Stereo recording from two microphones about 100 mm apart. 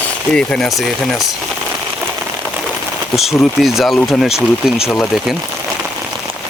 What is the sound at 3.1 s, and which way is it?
Speech, centre (ahead or behind).